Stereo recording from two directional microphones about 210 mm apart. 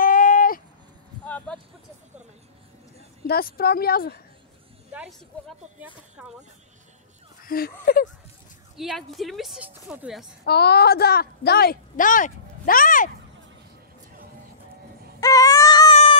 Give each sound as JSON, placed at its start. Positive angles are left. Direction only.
{"t": 0.0, "sound": "a sound", "side_deg": 40}
{"t": 1.2, "sound": "a sound", "side_deg": 5}
{"t": 3.3, "sound": "a woman's voice", "side_deg": 45}
{"t": 5.3, "sound": "speech", "side_deg": 5}
{"t": 6.2, "sound": "speech", "side_deg": -5}
{"t": 7.4, "sound": "a woman's voice", "side_deg": 45}
{"t": 8.7, "sound": "speech", "side_deg": 0}
{"t": 10.4, "sound": "a woman's voice", "side_deg": 50}
{"t": 15.1, "sound": "a sound", "side_deg": 15}